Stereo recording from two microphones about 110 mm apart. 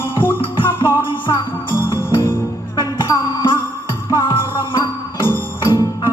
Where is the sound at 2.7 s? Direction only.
40° left (ahead or behind).